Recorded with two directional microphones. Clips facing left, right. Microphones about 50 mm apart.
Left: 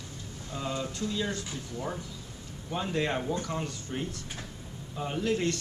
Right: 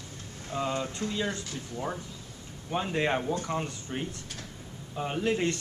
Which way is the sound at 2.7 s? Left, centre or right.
Right.